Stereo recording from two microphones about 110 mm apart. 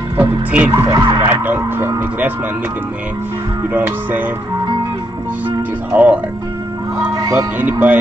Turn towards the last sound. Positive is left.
turn(degrees=-15)  # may be behind; listen again after turning